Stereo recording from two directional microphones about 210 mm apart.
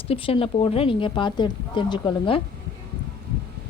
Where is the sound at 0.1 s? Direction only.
25° left (ahead or behind).